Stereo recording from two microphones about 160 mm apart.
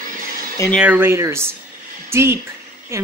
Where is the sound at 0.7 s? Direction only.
10° right (ahead or behind).